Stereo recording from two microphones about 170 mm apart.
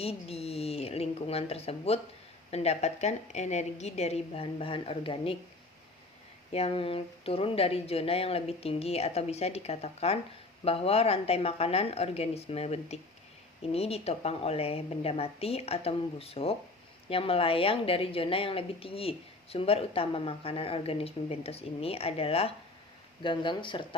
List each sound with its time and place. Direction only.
0.0 s a woman's voice: 35° left (ahead or behind)
6.5 s a woman's voice: 35° left (ahead or behind)